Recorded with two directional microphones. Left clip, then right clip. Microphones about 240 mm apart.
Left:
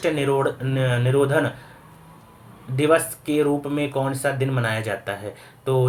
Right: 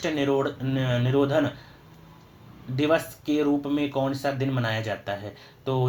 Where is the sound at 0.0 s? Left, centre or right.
Right.